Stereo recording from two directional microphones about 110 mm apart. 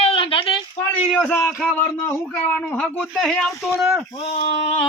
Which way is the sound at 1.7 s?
20° left (ahead or behind).